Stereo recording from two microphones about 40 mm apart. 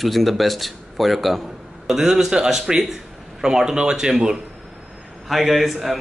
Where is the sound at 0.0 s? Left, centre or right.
Centre.